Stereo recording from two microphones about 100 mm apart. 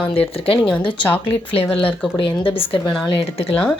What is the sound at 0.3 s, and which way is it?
Speech, 70° left (ahead or behind).